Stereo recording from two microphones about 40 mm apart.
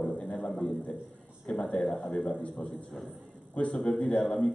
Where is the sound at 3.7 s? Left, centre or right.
Left.